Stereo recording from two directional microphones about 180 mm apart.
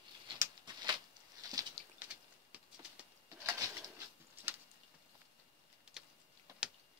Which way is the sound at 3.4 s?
15° right (ahead or behind).